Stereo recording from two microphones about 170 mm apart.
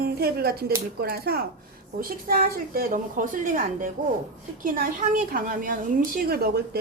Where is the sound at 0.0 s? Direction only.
65° right (ahead or behind).